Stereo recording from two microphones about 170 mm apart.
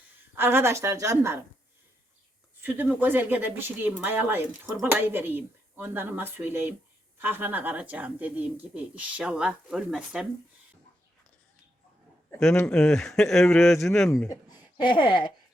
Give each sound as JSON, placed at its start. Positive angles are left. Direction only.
{"t": 0.3, "sound": "speech", "side_deg": -15}
{"t": 2.6, "sound": "speech", "side_deg": -10}
{"t": 12.5, "sound": "speech", "side_deg": 5}
{"t": 14.1, "sound": "speech", "side_deg": 20}